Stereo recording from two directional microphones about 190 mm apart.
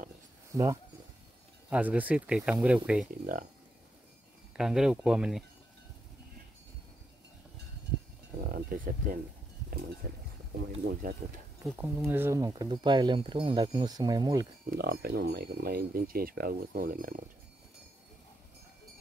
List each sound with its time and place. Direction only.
0.5 s speech: 15° right (ahead or behind)
4.6 s speech: 5° right (ahead or behind)
8.4 s speech: 50° right (ahead or behind)
11.6 s speech: 15° right (ahead or behind)
14.7 s speech: 55° right (ahead or behind)